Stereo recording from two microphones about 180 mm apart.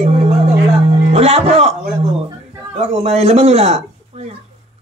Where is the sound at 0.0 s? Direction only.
35° right (ahead or behind).